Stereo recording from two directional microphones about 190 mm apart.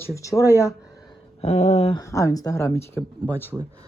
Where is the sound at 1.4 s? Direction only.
35° left (ahead or behind).